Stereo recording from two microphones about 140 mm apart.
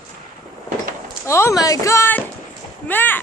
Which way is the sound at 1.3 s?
20° left (ahead or behind).